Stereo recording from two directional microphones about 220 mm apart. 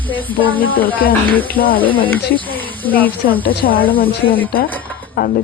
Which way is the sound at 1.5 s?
40° left (ahead or behind).